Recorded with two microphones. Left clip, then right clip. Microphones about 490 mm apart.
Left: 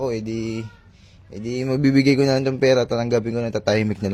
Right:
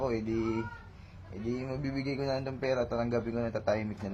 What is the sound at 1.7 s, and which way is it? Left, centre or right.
Speech, left.